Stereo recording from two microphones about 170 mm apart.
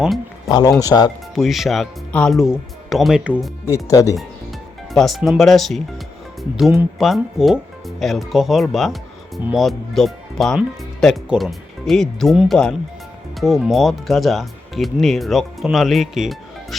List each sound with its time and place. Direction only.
0.4 s speech: 20° left (ahead or behind)
1.4 s speech: centre (ahead or behind)
3.8 s speech: 20° left (ahead or behind)
4.9 s speech: centre (ahead or behind)
7.0 s speech: centre (ahead or behind)